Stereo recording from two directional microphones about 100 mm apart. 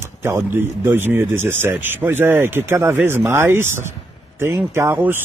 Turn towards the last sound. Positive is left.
turn(degrees=-20)  # may be behind; listen again after turning